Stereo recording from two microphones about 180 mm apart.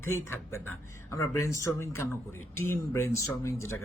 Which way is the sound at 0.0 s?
15° left (ahead or behind).